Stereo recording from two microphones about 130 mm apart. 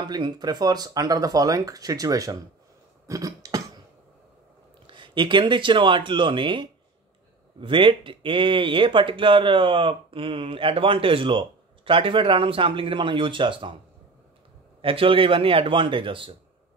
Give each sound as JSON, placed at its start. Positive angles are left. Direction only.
{"t": 0.0, "sound": "speech", "side_deg": -35}
{"t": 3.1, "sound": "a sound", "side_deg": -25}
{"t": 4.8, "sound": "speech", "side_deg": -40}
{"t": 14.8, "sound": "speech", "side_deg": -45}